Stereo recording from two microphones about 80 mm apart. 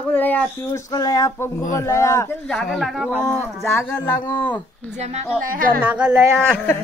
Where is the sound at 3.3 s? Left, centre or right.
Left.